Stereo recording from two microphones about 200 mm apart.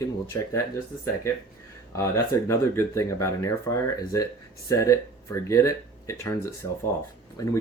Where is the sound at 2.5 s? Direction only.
15° left (ahead or behind).